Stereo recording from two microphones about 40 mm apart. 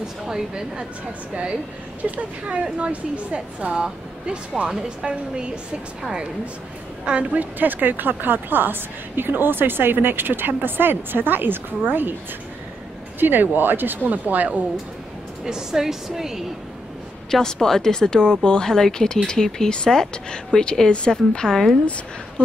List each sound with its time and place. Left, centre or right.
0.3 s a woman's voice: centre; by 3.7 s right
4.8 s a woman's voice: right
7.1 s a woman's voice: right
7.5 s a woman's voice: right
13.2 s speech: right
15.4 s a woman's voice: centre
17.3 s speech: centre
21.5 s a woman's voice: centre